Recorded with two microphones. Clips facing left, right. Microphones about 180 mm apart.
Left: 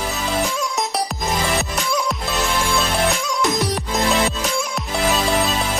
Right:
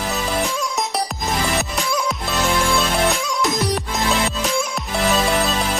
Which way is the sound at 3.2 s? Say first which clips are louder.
Even; centre (ahead or behind).